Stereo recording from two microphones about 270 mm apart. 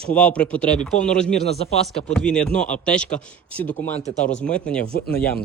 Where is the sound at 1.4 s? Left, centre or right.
Left.